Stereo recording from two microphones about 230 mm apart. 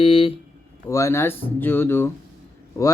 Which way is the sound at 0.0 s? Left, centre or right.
Left.